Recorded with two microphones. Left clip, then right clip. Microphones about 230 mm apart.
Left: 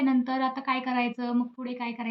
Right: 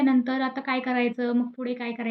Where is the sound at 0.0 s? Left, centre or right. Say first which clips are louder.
Right 3 dB; centre.